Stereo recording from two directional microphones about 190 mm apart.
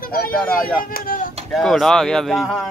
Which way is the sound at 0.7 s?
50° left (ahead or behind).